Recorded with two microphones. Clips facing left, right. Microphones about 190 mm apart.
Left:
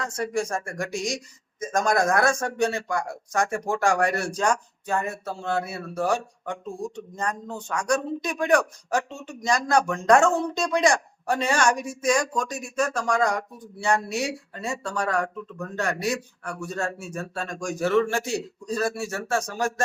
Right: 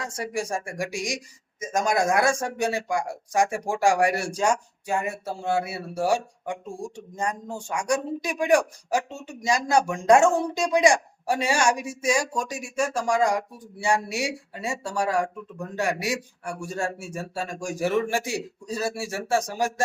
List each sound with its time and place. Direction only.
0.2 s speech: 15° right (ahead or behind)